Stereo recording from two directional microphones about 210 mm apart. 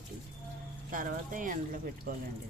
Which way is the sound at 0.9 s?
40° right (ahead or behind).